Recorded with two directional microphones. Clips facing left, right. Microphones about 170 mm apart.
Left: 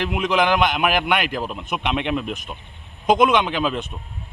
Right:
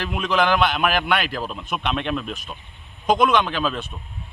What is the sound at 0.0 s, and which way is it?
A man's voice, 15° left (ahead or behind).